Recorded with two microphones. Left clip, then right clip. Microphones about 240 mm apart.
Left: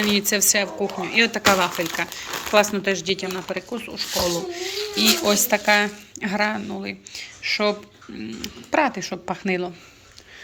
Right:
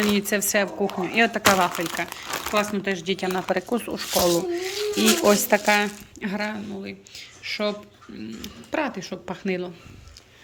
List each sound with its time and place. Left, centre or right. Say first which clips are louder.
0.0 s speech: left 3 dB; centre
3.5 s speech: right 4 dB; right
4.9 s speech: even; centre